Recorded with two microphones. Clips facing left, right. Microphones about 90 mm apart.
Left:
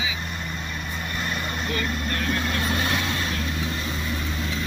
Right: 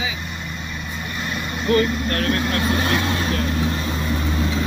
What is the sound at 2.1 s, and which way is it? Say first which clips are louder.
Speech: right 5 dB; 60° right (ahead or behind).